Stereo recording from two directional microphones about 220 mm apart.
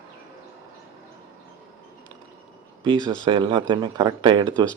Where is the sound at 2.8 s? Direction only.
20° right (ahead or behind).